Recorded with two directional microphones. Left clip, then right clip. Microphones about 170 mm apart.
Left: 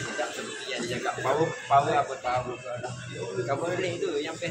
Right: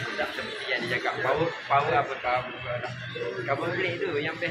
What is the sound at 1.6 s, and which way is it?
Speech, 10° left (ahead or behind).